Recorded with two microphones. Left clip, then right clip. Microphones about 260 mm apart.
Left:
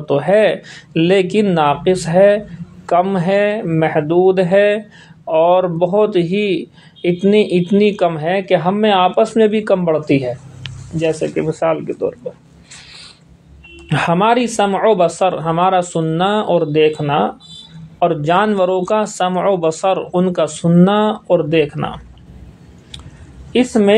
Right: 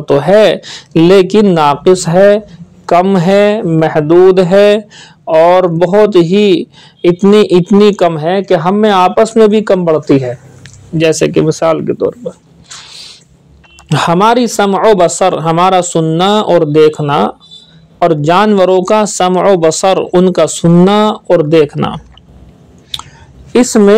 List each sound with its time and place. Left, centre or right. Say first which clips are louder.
0.0 s speech: right 6 dB; right
13.8 s speech: right 5 dB; right
22.9 s chewing: right 14 dB; right
23.5 s speech: right 6 dB; right